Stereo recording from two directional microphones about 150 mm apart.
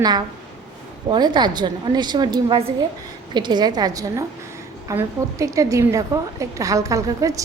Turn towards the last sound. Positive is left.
turn(degrees=-20)  # may be behind; listen again after turning